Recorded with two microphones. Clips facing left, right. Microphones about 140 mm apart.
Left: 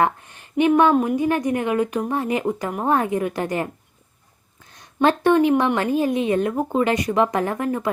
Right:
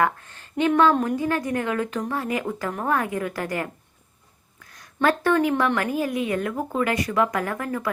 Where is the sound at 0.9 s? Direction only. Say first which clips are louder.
Left 4 dB; 15° left (ahead or behind).